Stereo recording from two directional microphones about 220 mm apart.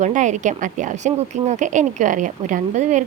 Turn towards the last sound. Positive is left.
turn(degrees=-35)  # may be behind; listen again after turning